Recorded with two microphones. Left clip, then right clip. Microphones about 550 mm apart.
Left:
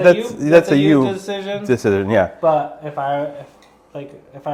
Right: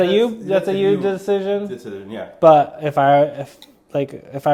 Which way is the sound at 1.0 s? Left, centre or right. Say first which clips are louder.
Right 3 dB; right.